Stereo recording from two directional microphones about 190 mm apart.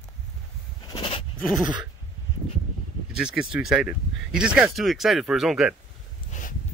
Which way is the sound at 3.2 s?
5° right (ahead or behind).